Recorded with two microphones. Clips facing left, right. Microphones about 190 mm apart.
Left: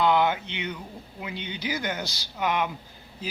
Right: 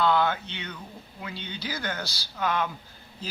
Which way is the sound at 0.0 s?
15° left (ahead or behind).